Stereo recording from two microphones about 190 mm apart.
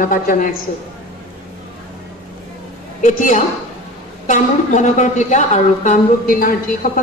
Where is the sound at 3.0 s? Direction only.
40° left (ahead or behind).